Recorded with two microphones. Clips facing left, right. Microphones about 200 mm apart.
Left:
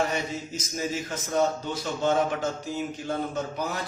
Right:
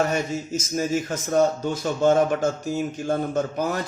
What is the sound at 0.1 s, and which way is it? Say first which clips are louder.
A man's voice: right 5 dB; 45° right (ahead or behind).